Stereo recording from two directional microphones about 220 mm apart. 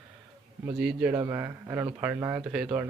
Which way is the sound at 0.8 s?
5° right (ahead or behind).